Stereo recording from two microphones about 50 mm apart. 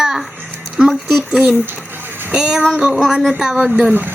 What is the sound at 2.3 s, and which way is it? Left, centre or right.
A woman's voice, centre.